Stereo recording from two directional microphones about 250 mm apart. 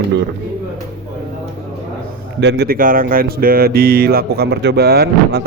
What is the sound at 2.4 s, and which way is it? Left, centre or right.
A man's voice, right.